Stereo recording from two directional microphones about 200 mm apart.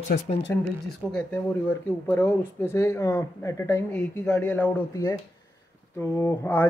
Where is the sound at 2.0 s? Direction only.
10° left (ahead or behind).